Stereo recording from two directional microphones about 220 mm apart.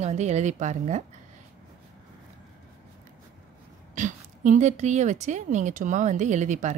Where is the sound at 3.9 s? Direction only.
35° right (ahead or behind).